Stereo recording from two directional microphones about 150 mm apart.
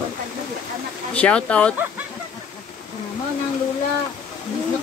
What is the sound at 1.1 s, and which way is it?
Speech, 10° left (ahead or behind).